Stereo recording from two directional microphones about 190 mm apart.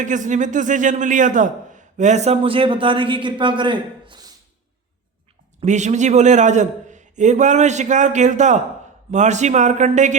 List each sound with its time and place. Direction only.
0.0 s speech: 40° right (ahead or behind); by 4.3 s 25° right (ahead or behind)
5.5 s speech: 40° right (ahead or behind)